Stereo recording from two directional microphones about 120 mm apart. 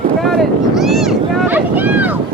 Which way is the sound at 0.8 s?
Centre (ahead or behind).